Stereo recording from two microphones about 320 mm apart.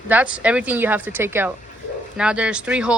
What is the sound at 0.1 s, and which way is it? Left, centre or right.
Speech, centre.